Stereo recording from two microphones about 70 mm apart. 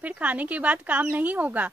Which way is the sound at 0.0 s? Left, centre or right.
Centre.